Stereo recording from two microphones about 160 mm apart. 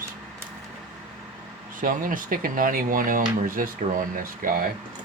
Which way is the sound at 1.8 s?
60° right (ahead or behind).